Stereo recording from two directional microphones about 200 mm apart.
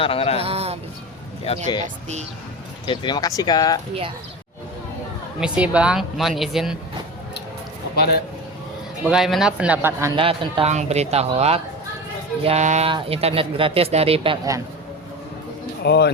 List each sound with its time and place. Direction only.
0.0 s speech: 30° left (ahead or behind)
0.4 s music: 30° right (ahead or behind)
1.5 s speech: 30° left (ahead or behind)
1.8 s speech: 35° right (ahead or behind)
2.8 s speech: 25° left (ahead or behind)
5.4 s speech: 5° right (ahead or behind)
9.0 s speech: centre (ahead or behind)
10.2 s speech: 25° right (ahead or behind)
15.8 s speech: 55° left (ahead or behind)